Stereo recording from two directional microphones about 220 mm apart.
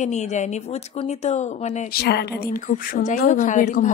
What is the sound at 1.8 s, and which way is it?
A woman's voice, 45° left (ahead or behind).